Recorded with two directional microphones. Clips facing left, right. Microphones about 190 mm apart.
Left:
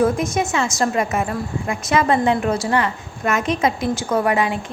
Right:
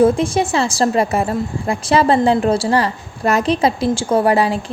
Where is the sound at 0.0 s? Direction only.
30° right (ahead or behind).